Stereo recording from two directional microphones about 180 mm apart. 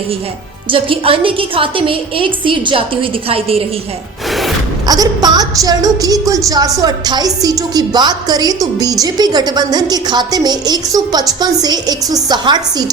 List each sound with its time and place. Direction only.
0.7 s a woman's voice: 30° right (ahead or behind)
4.3 s music: centre (ahead or behind)
4.9 s a woman's voice: 20° right (ahead or behind)